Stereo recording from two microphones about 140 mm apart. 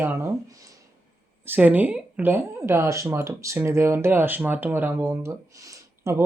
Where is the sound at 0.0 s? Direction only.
15° right (ahead or behind).